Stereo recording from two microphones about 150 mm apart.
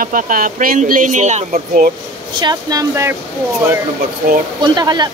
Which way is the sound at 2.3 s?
25° right (ahead or behind).